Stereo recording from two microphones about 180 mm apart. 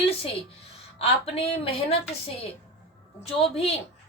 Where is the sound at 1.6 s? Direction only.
35° left (ahead or behind).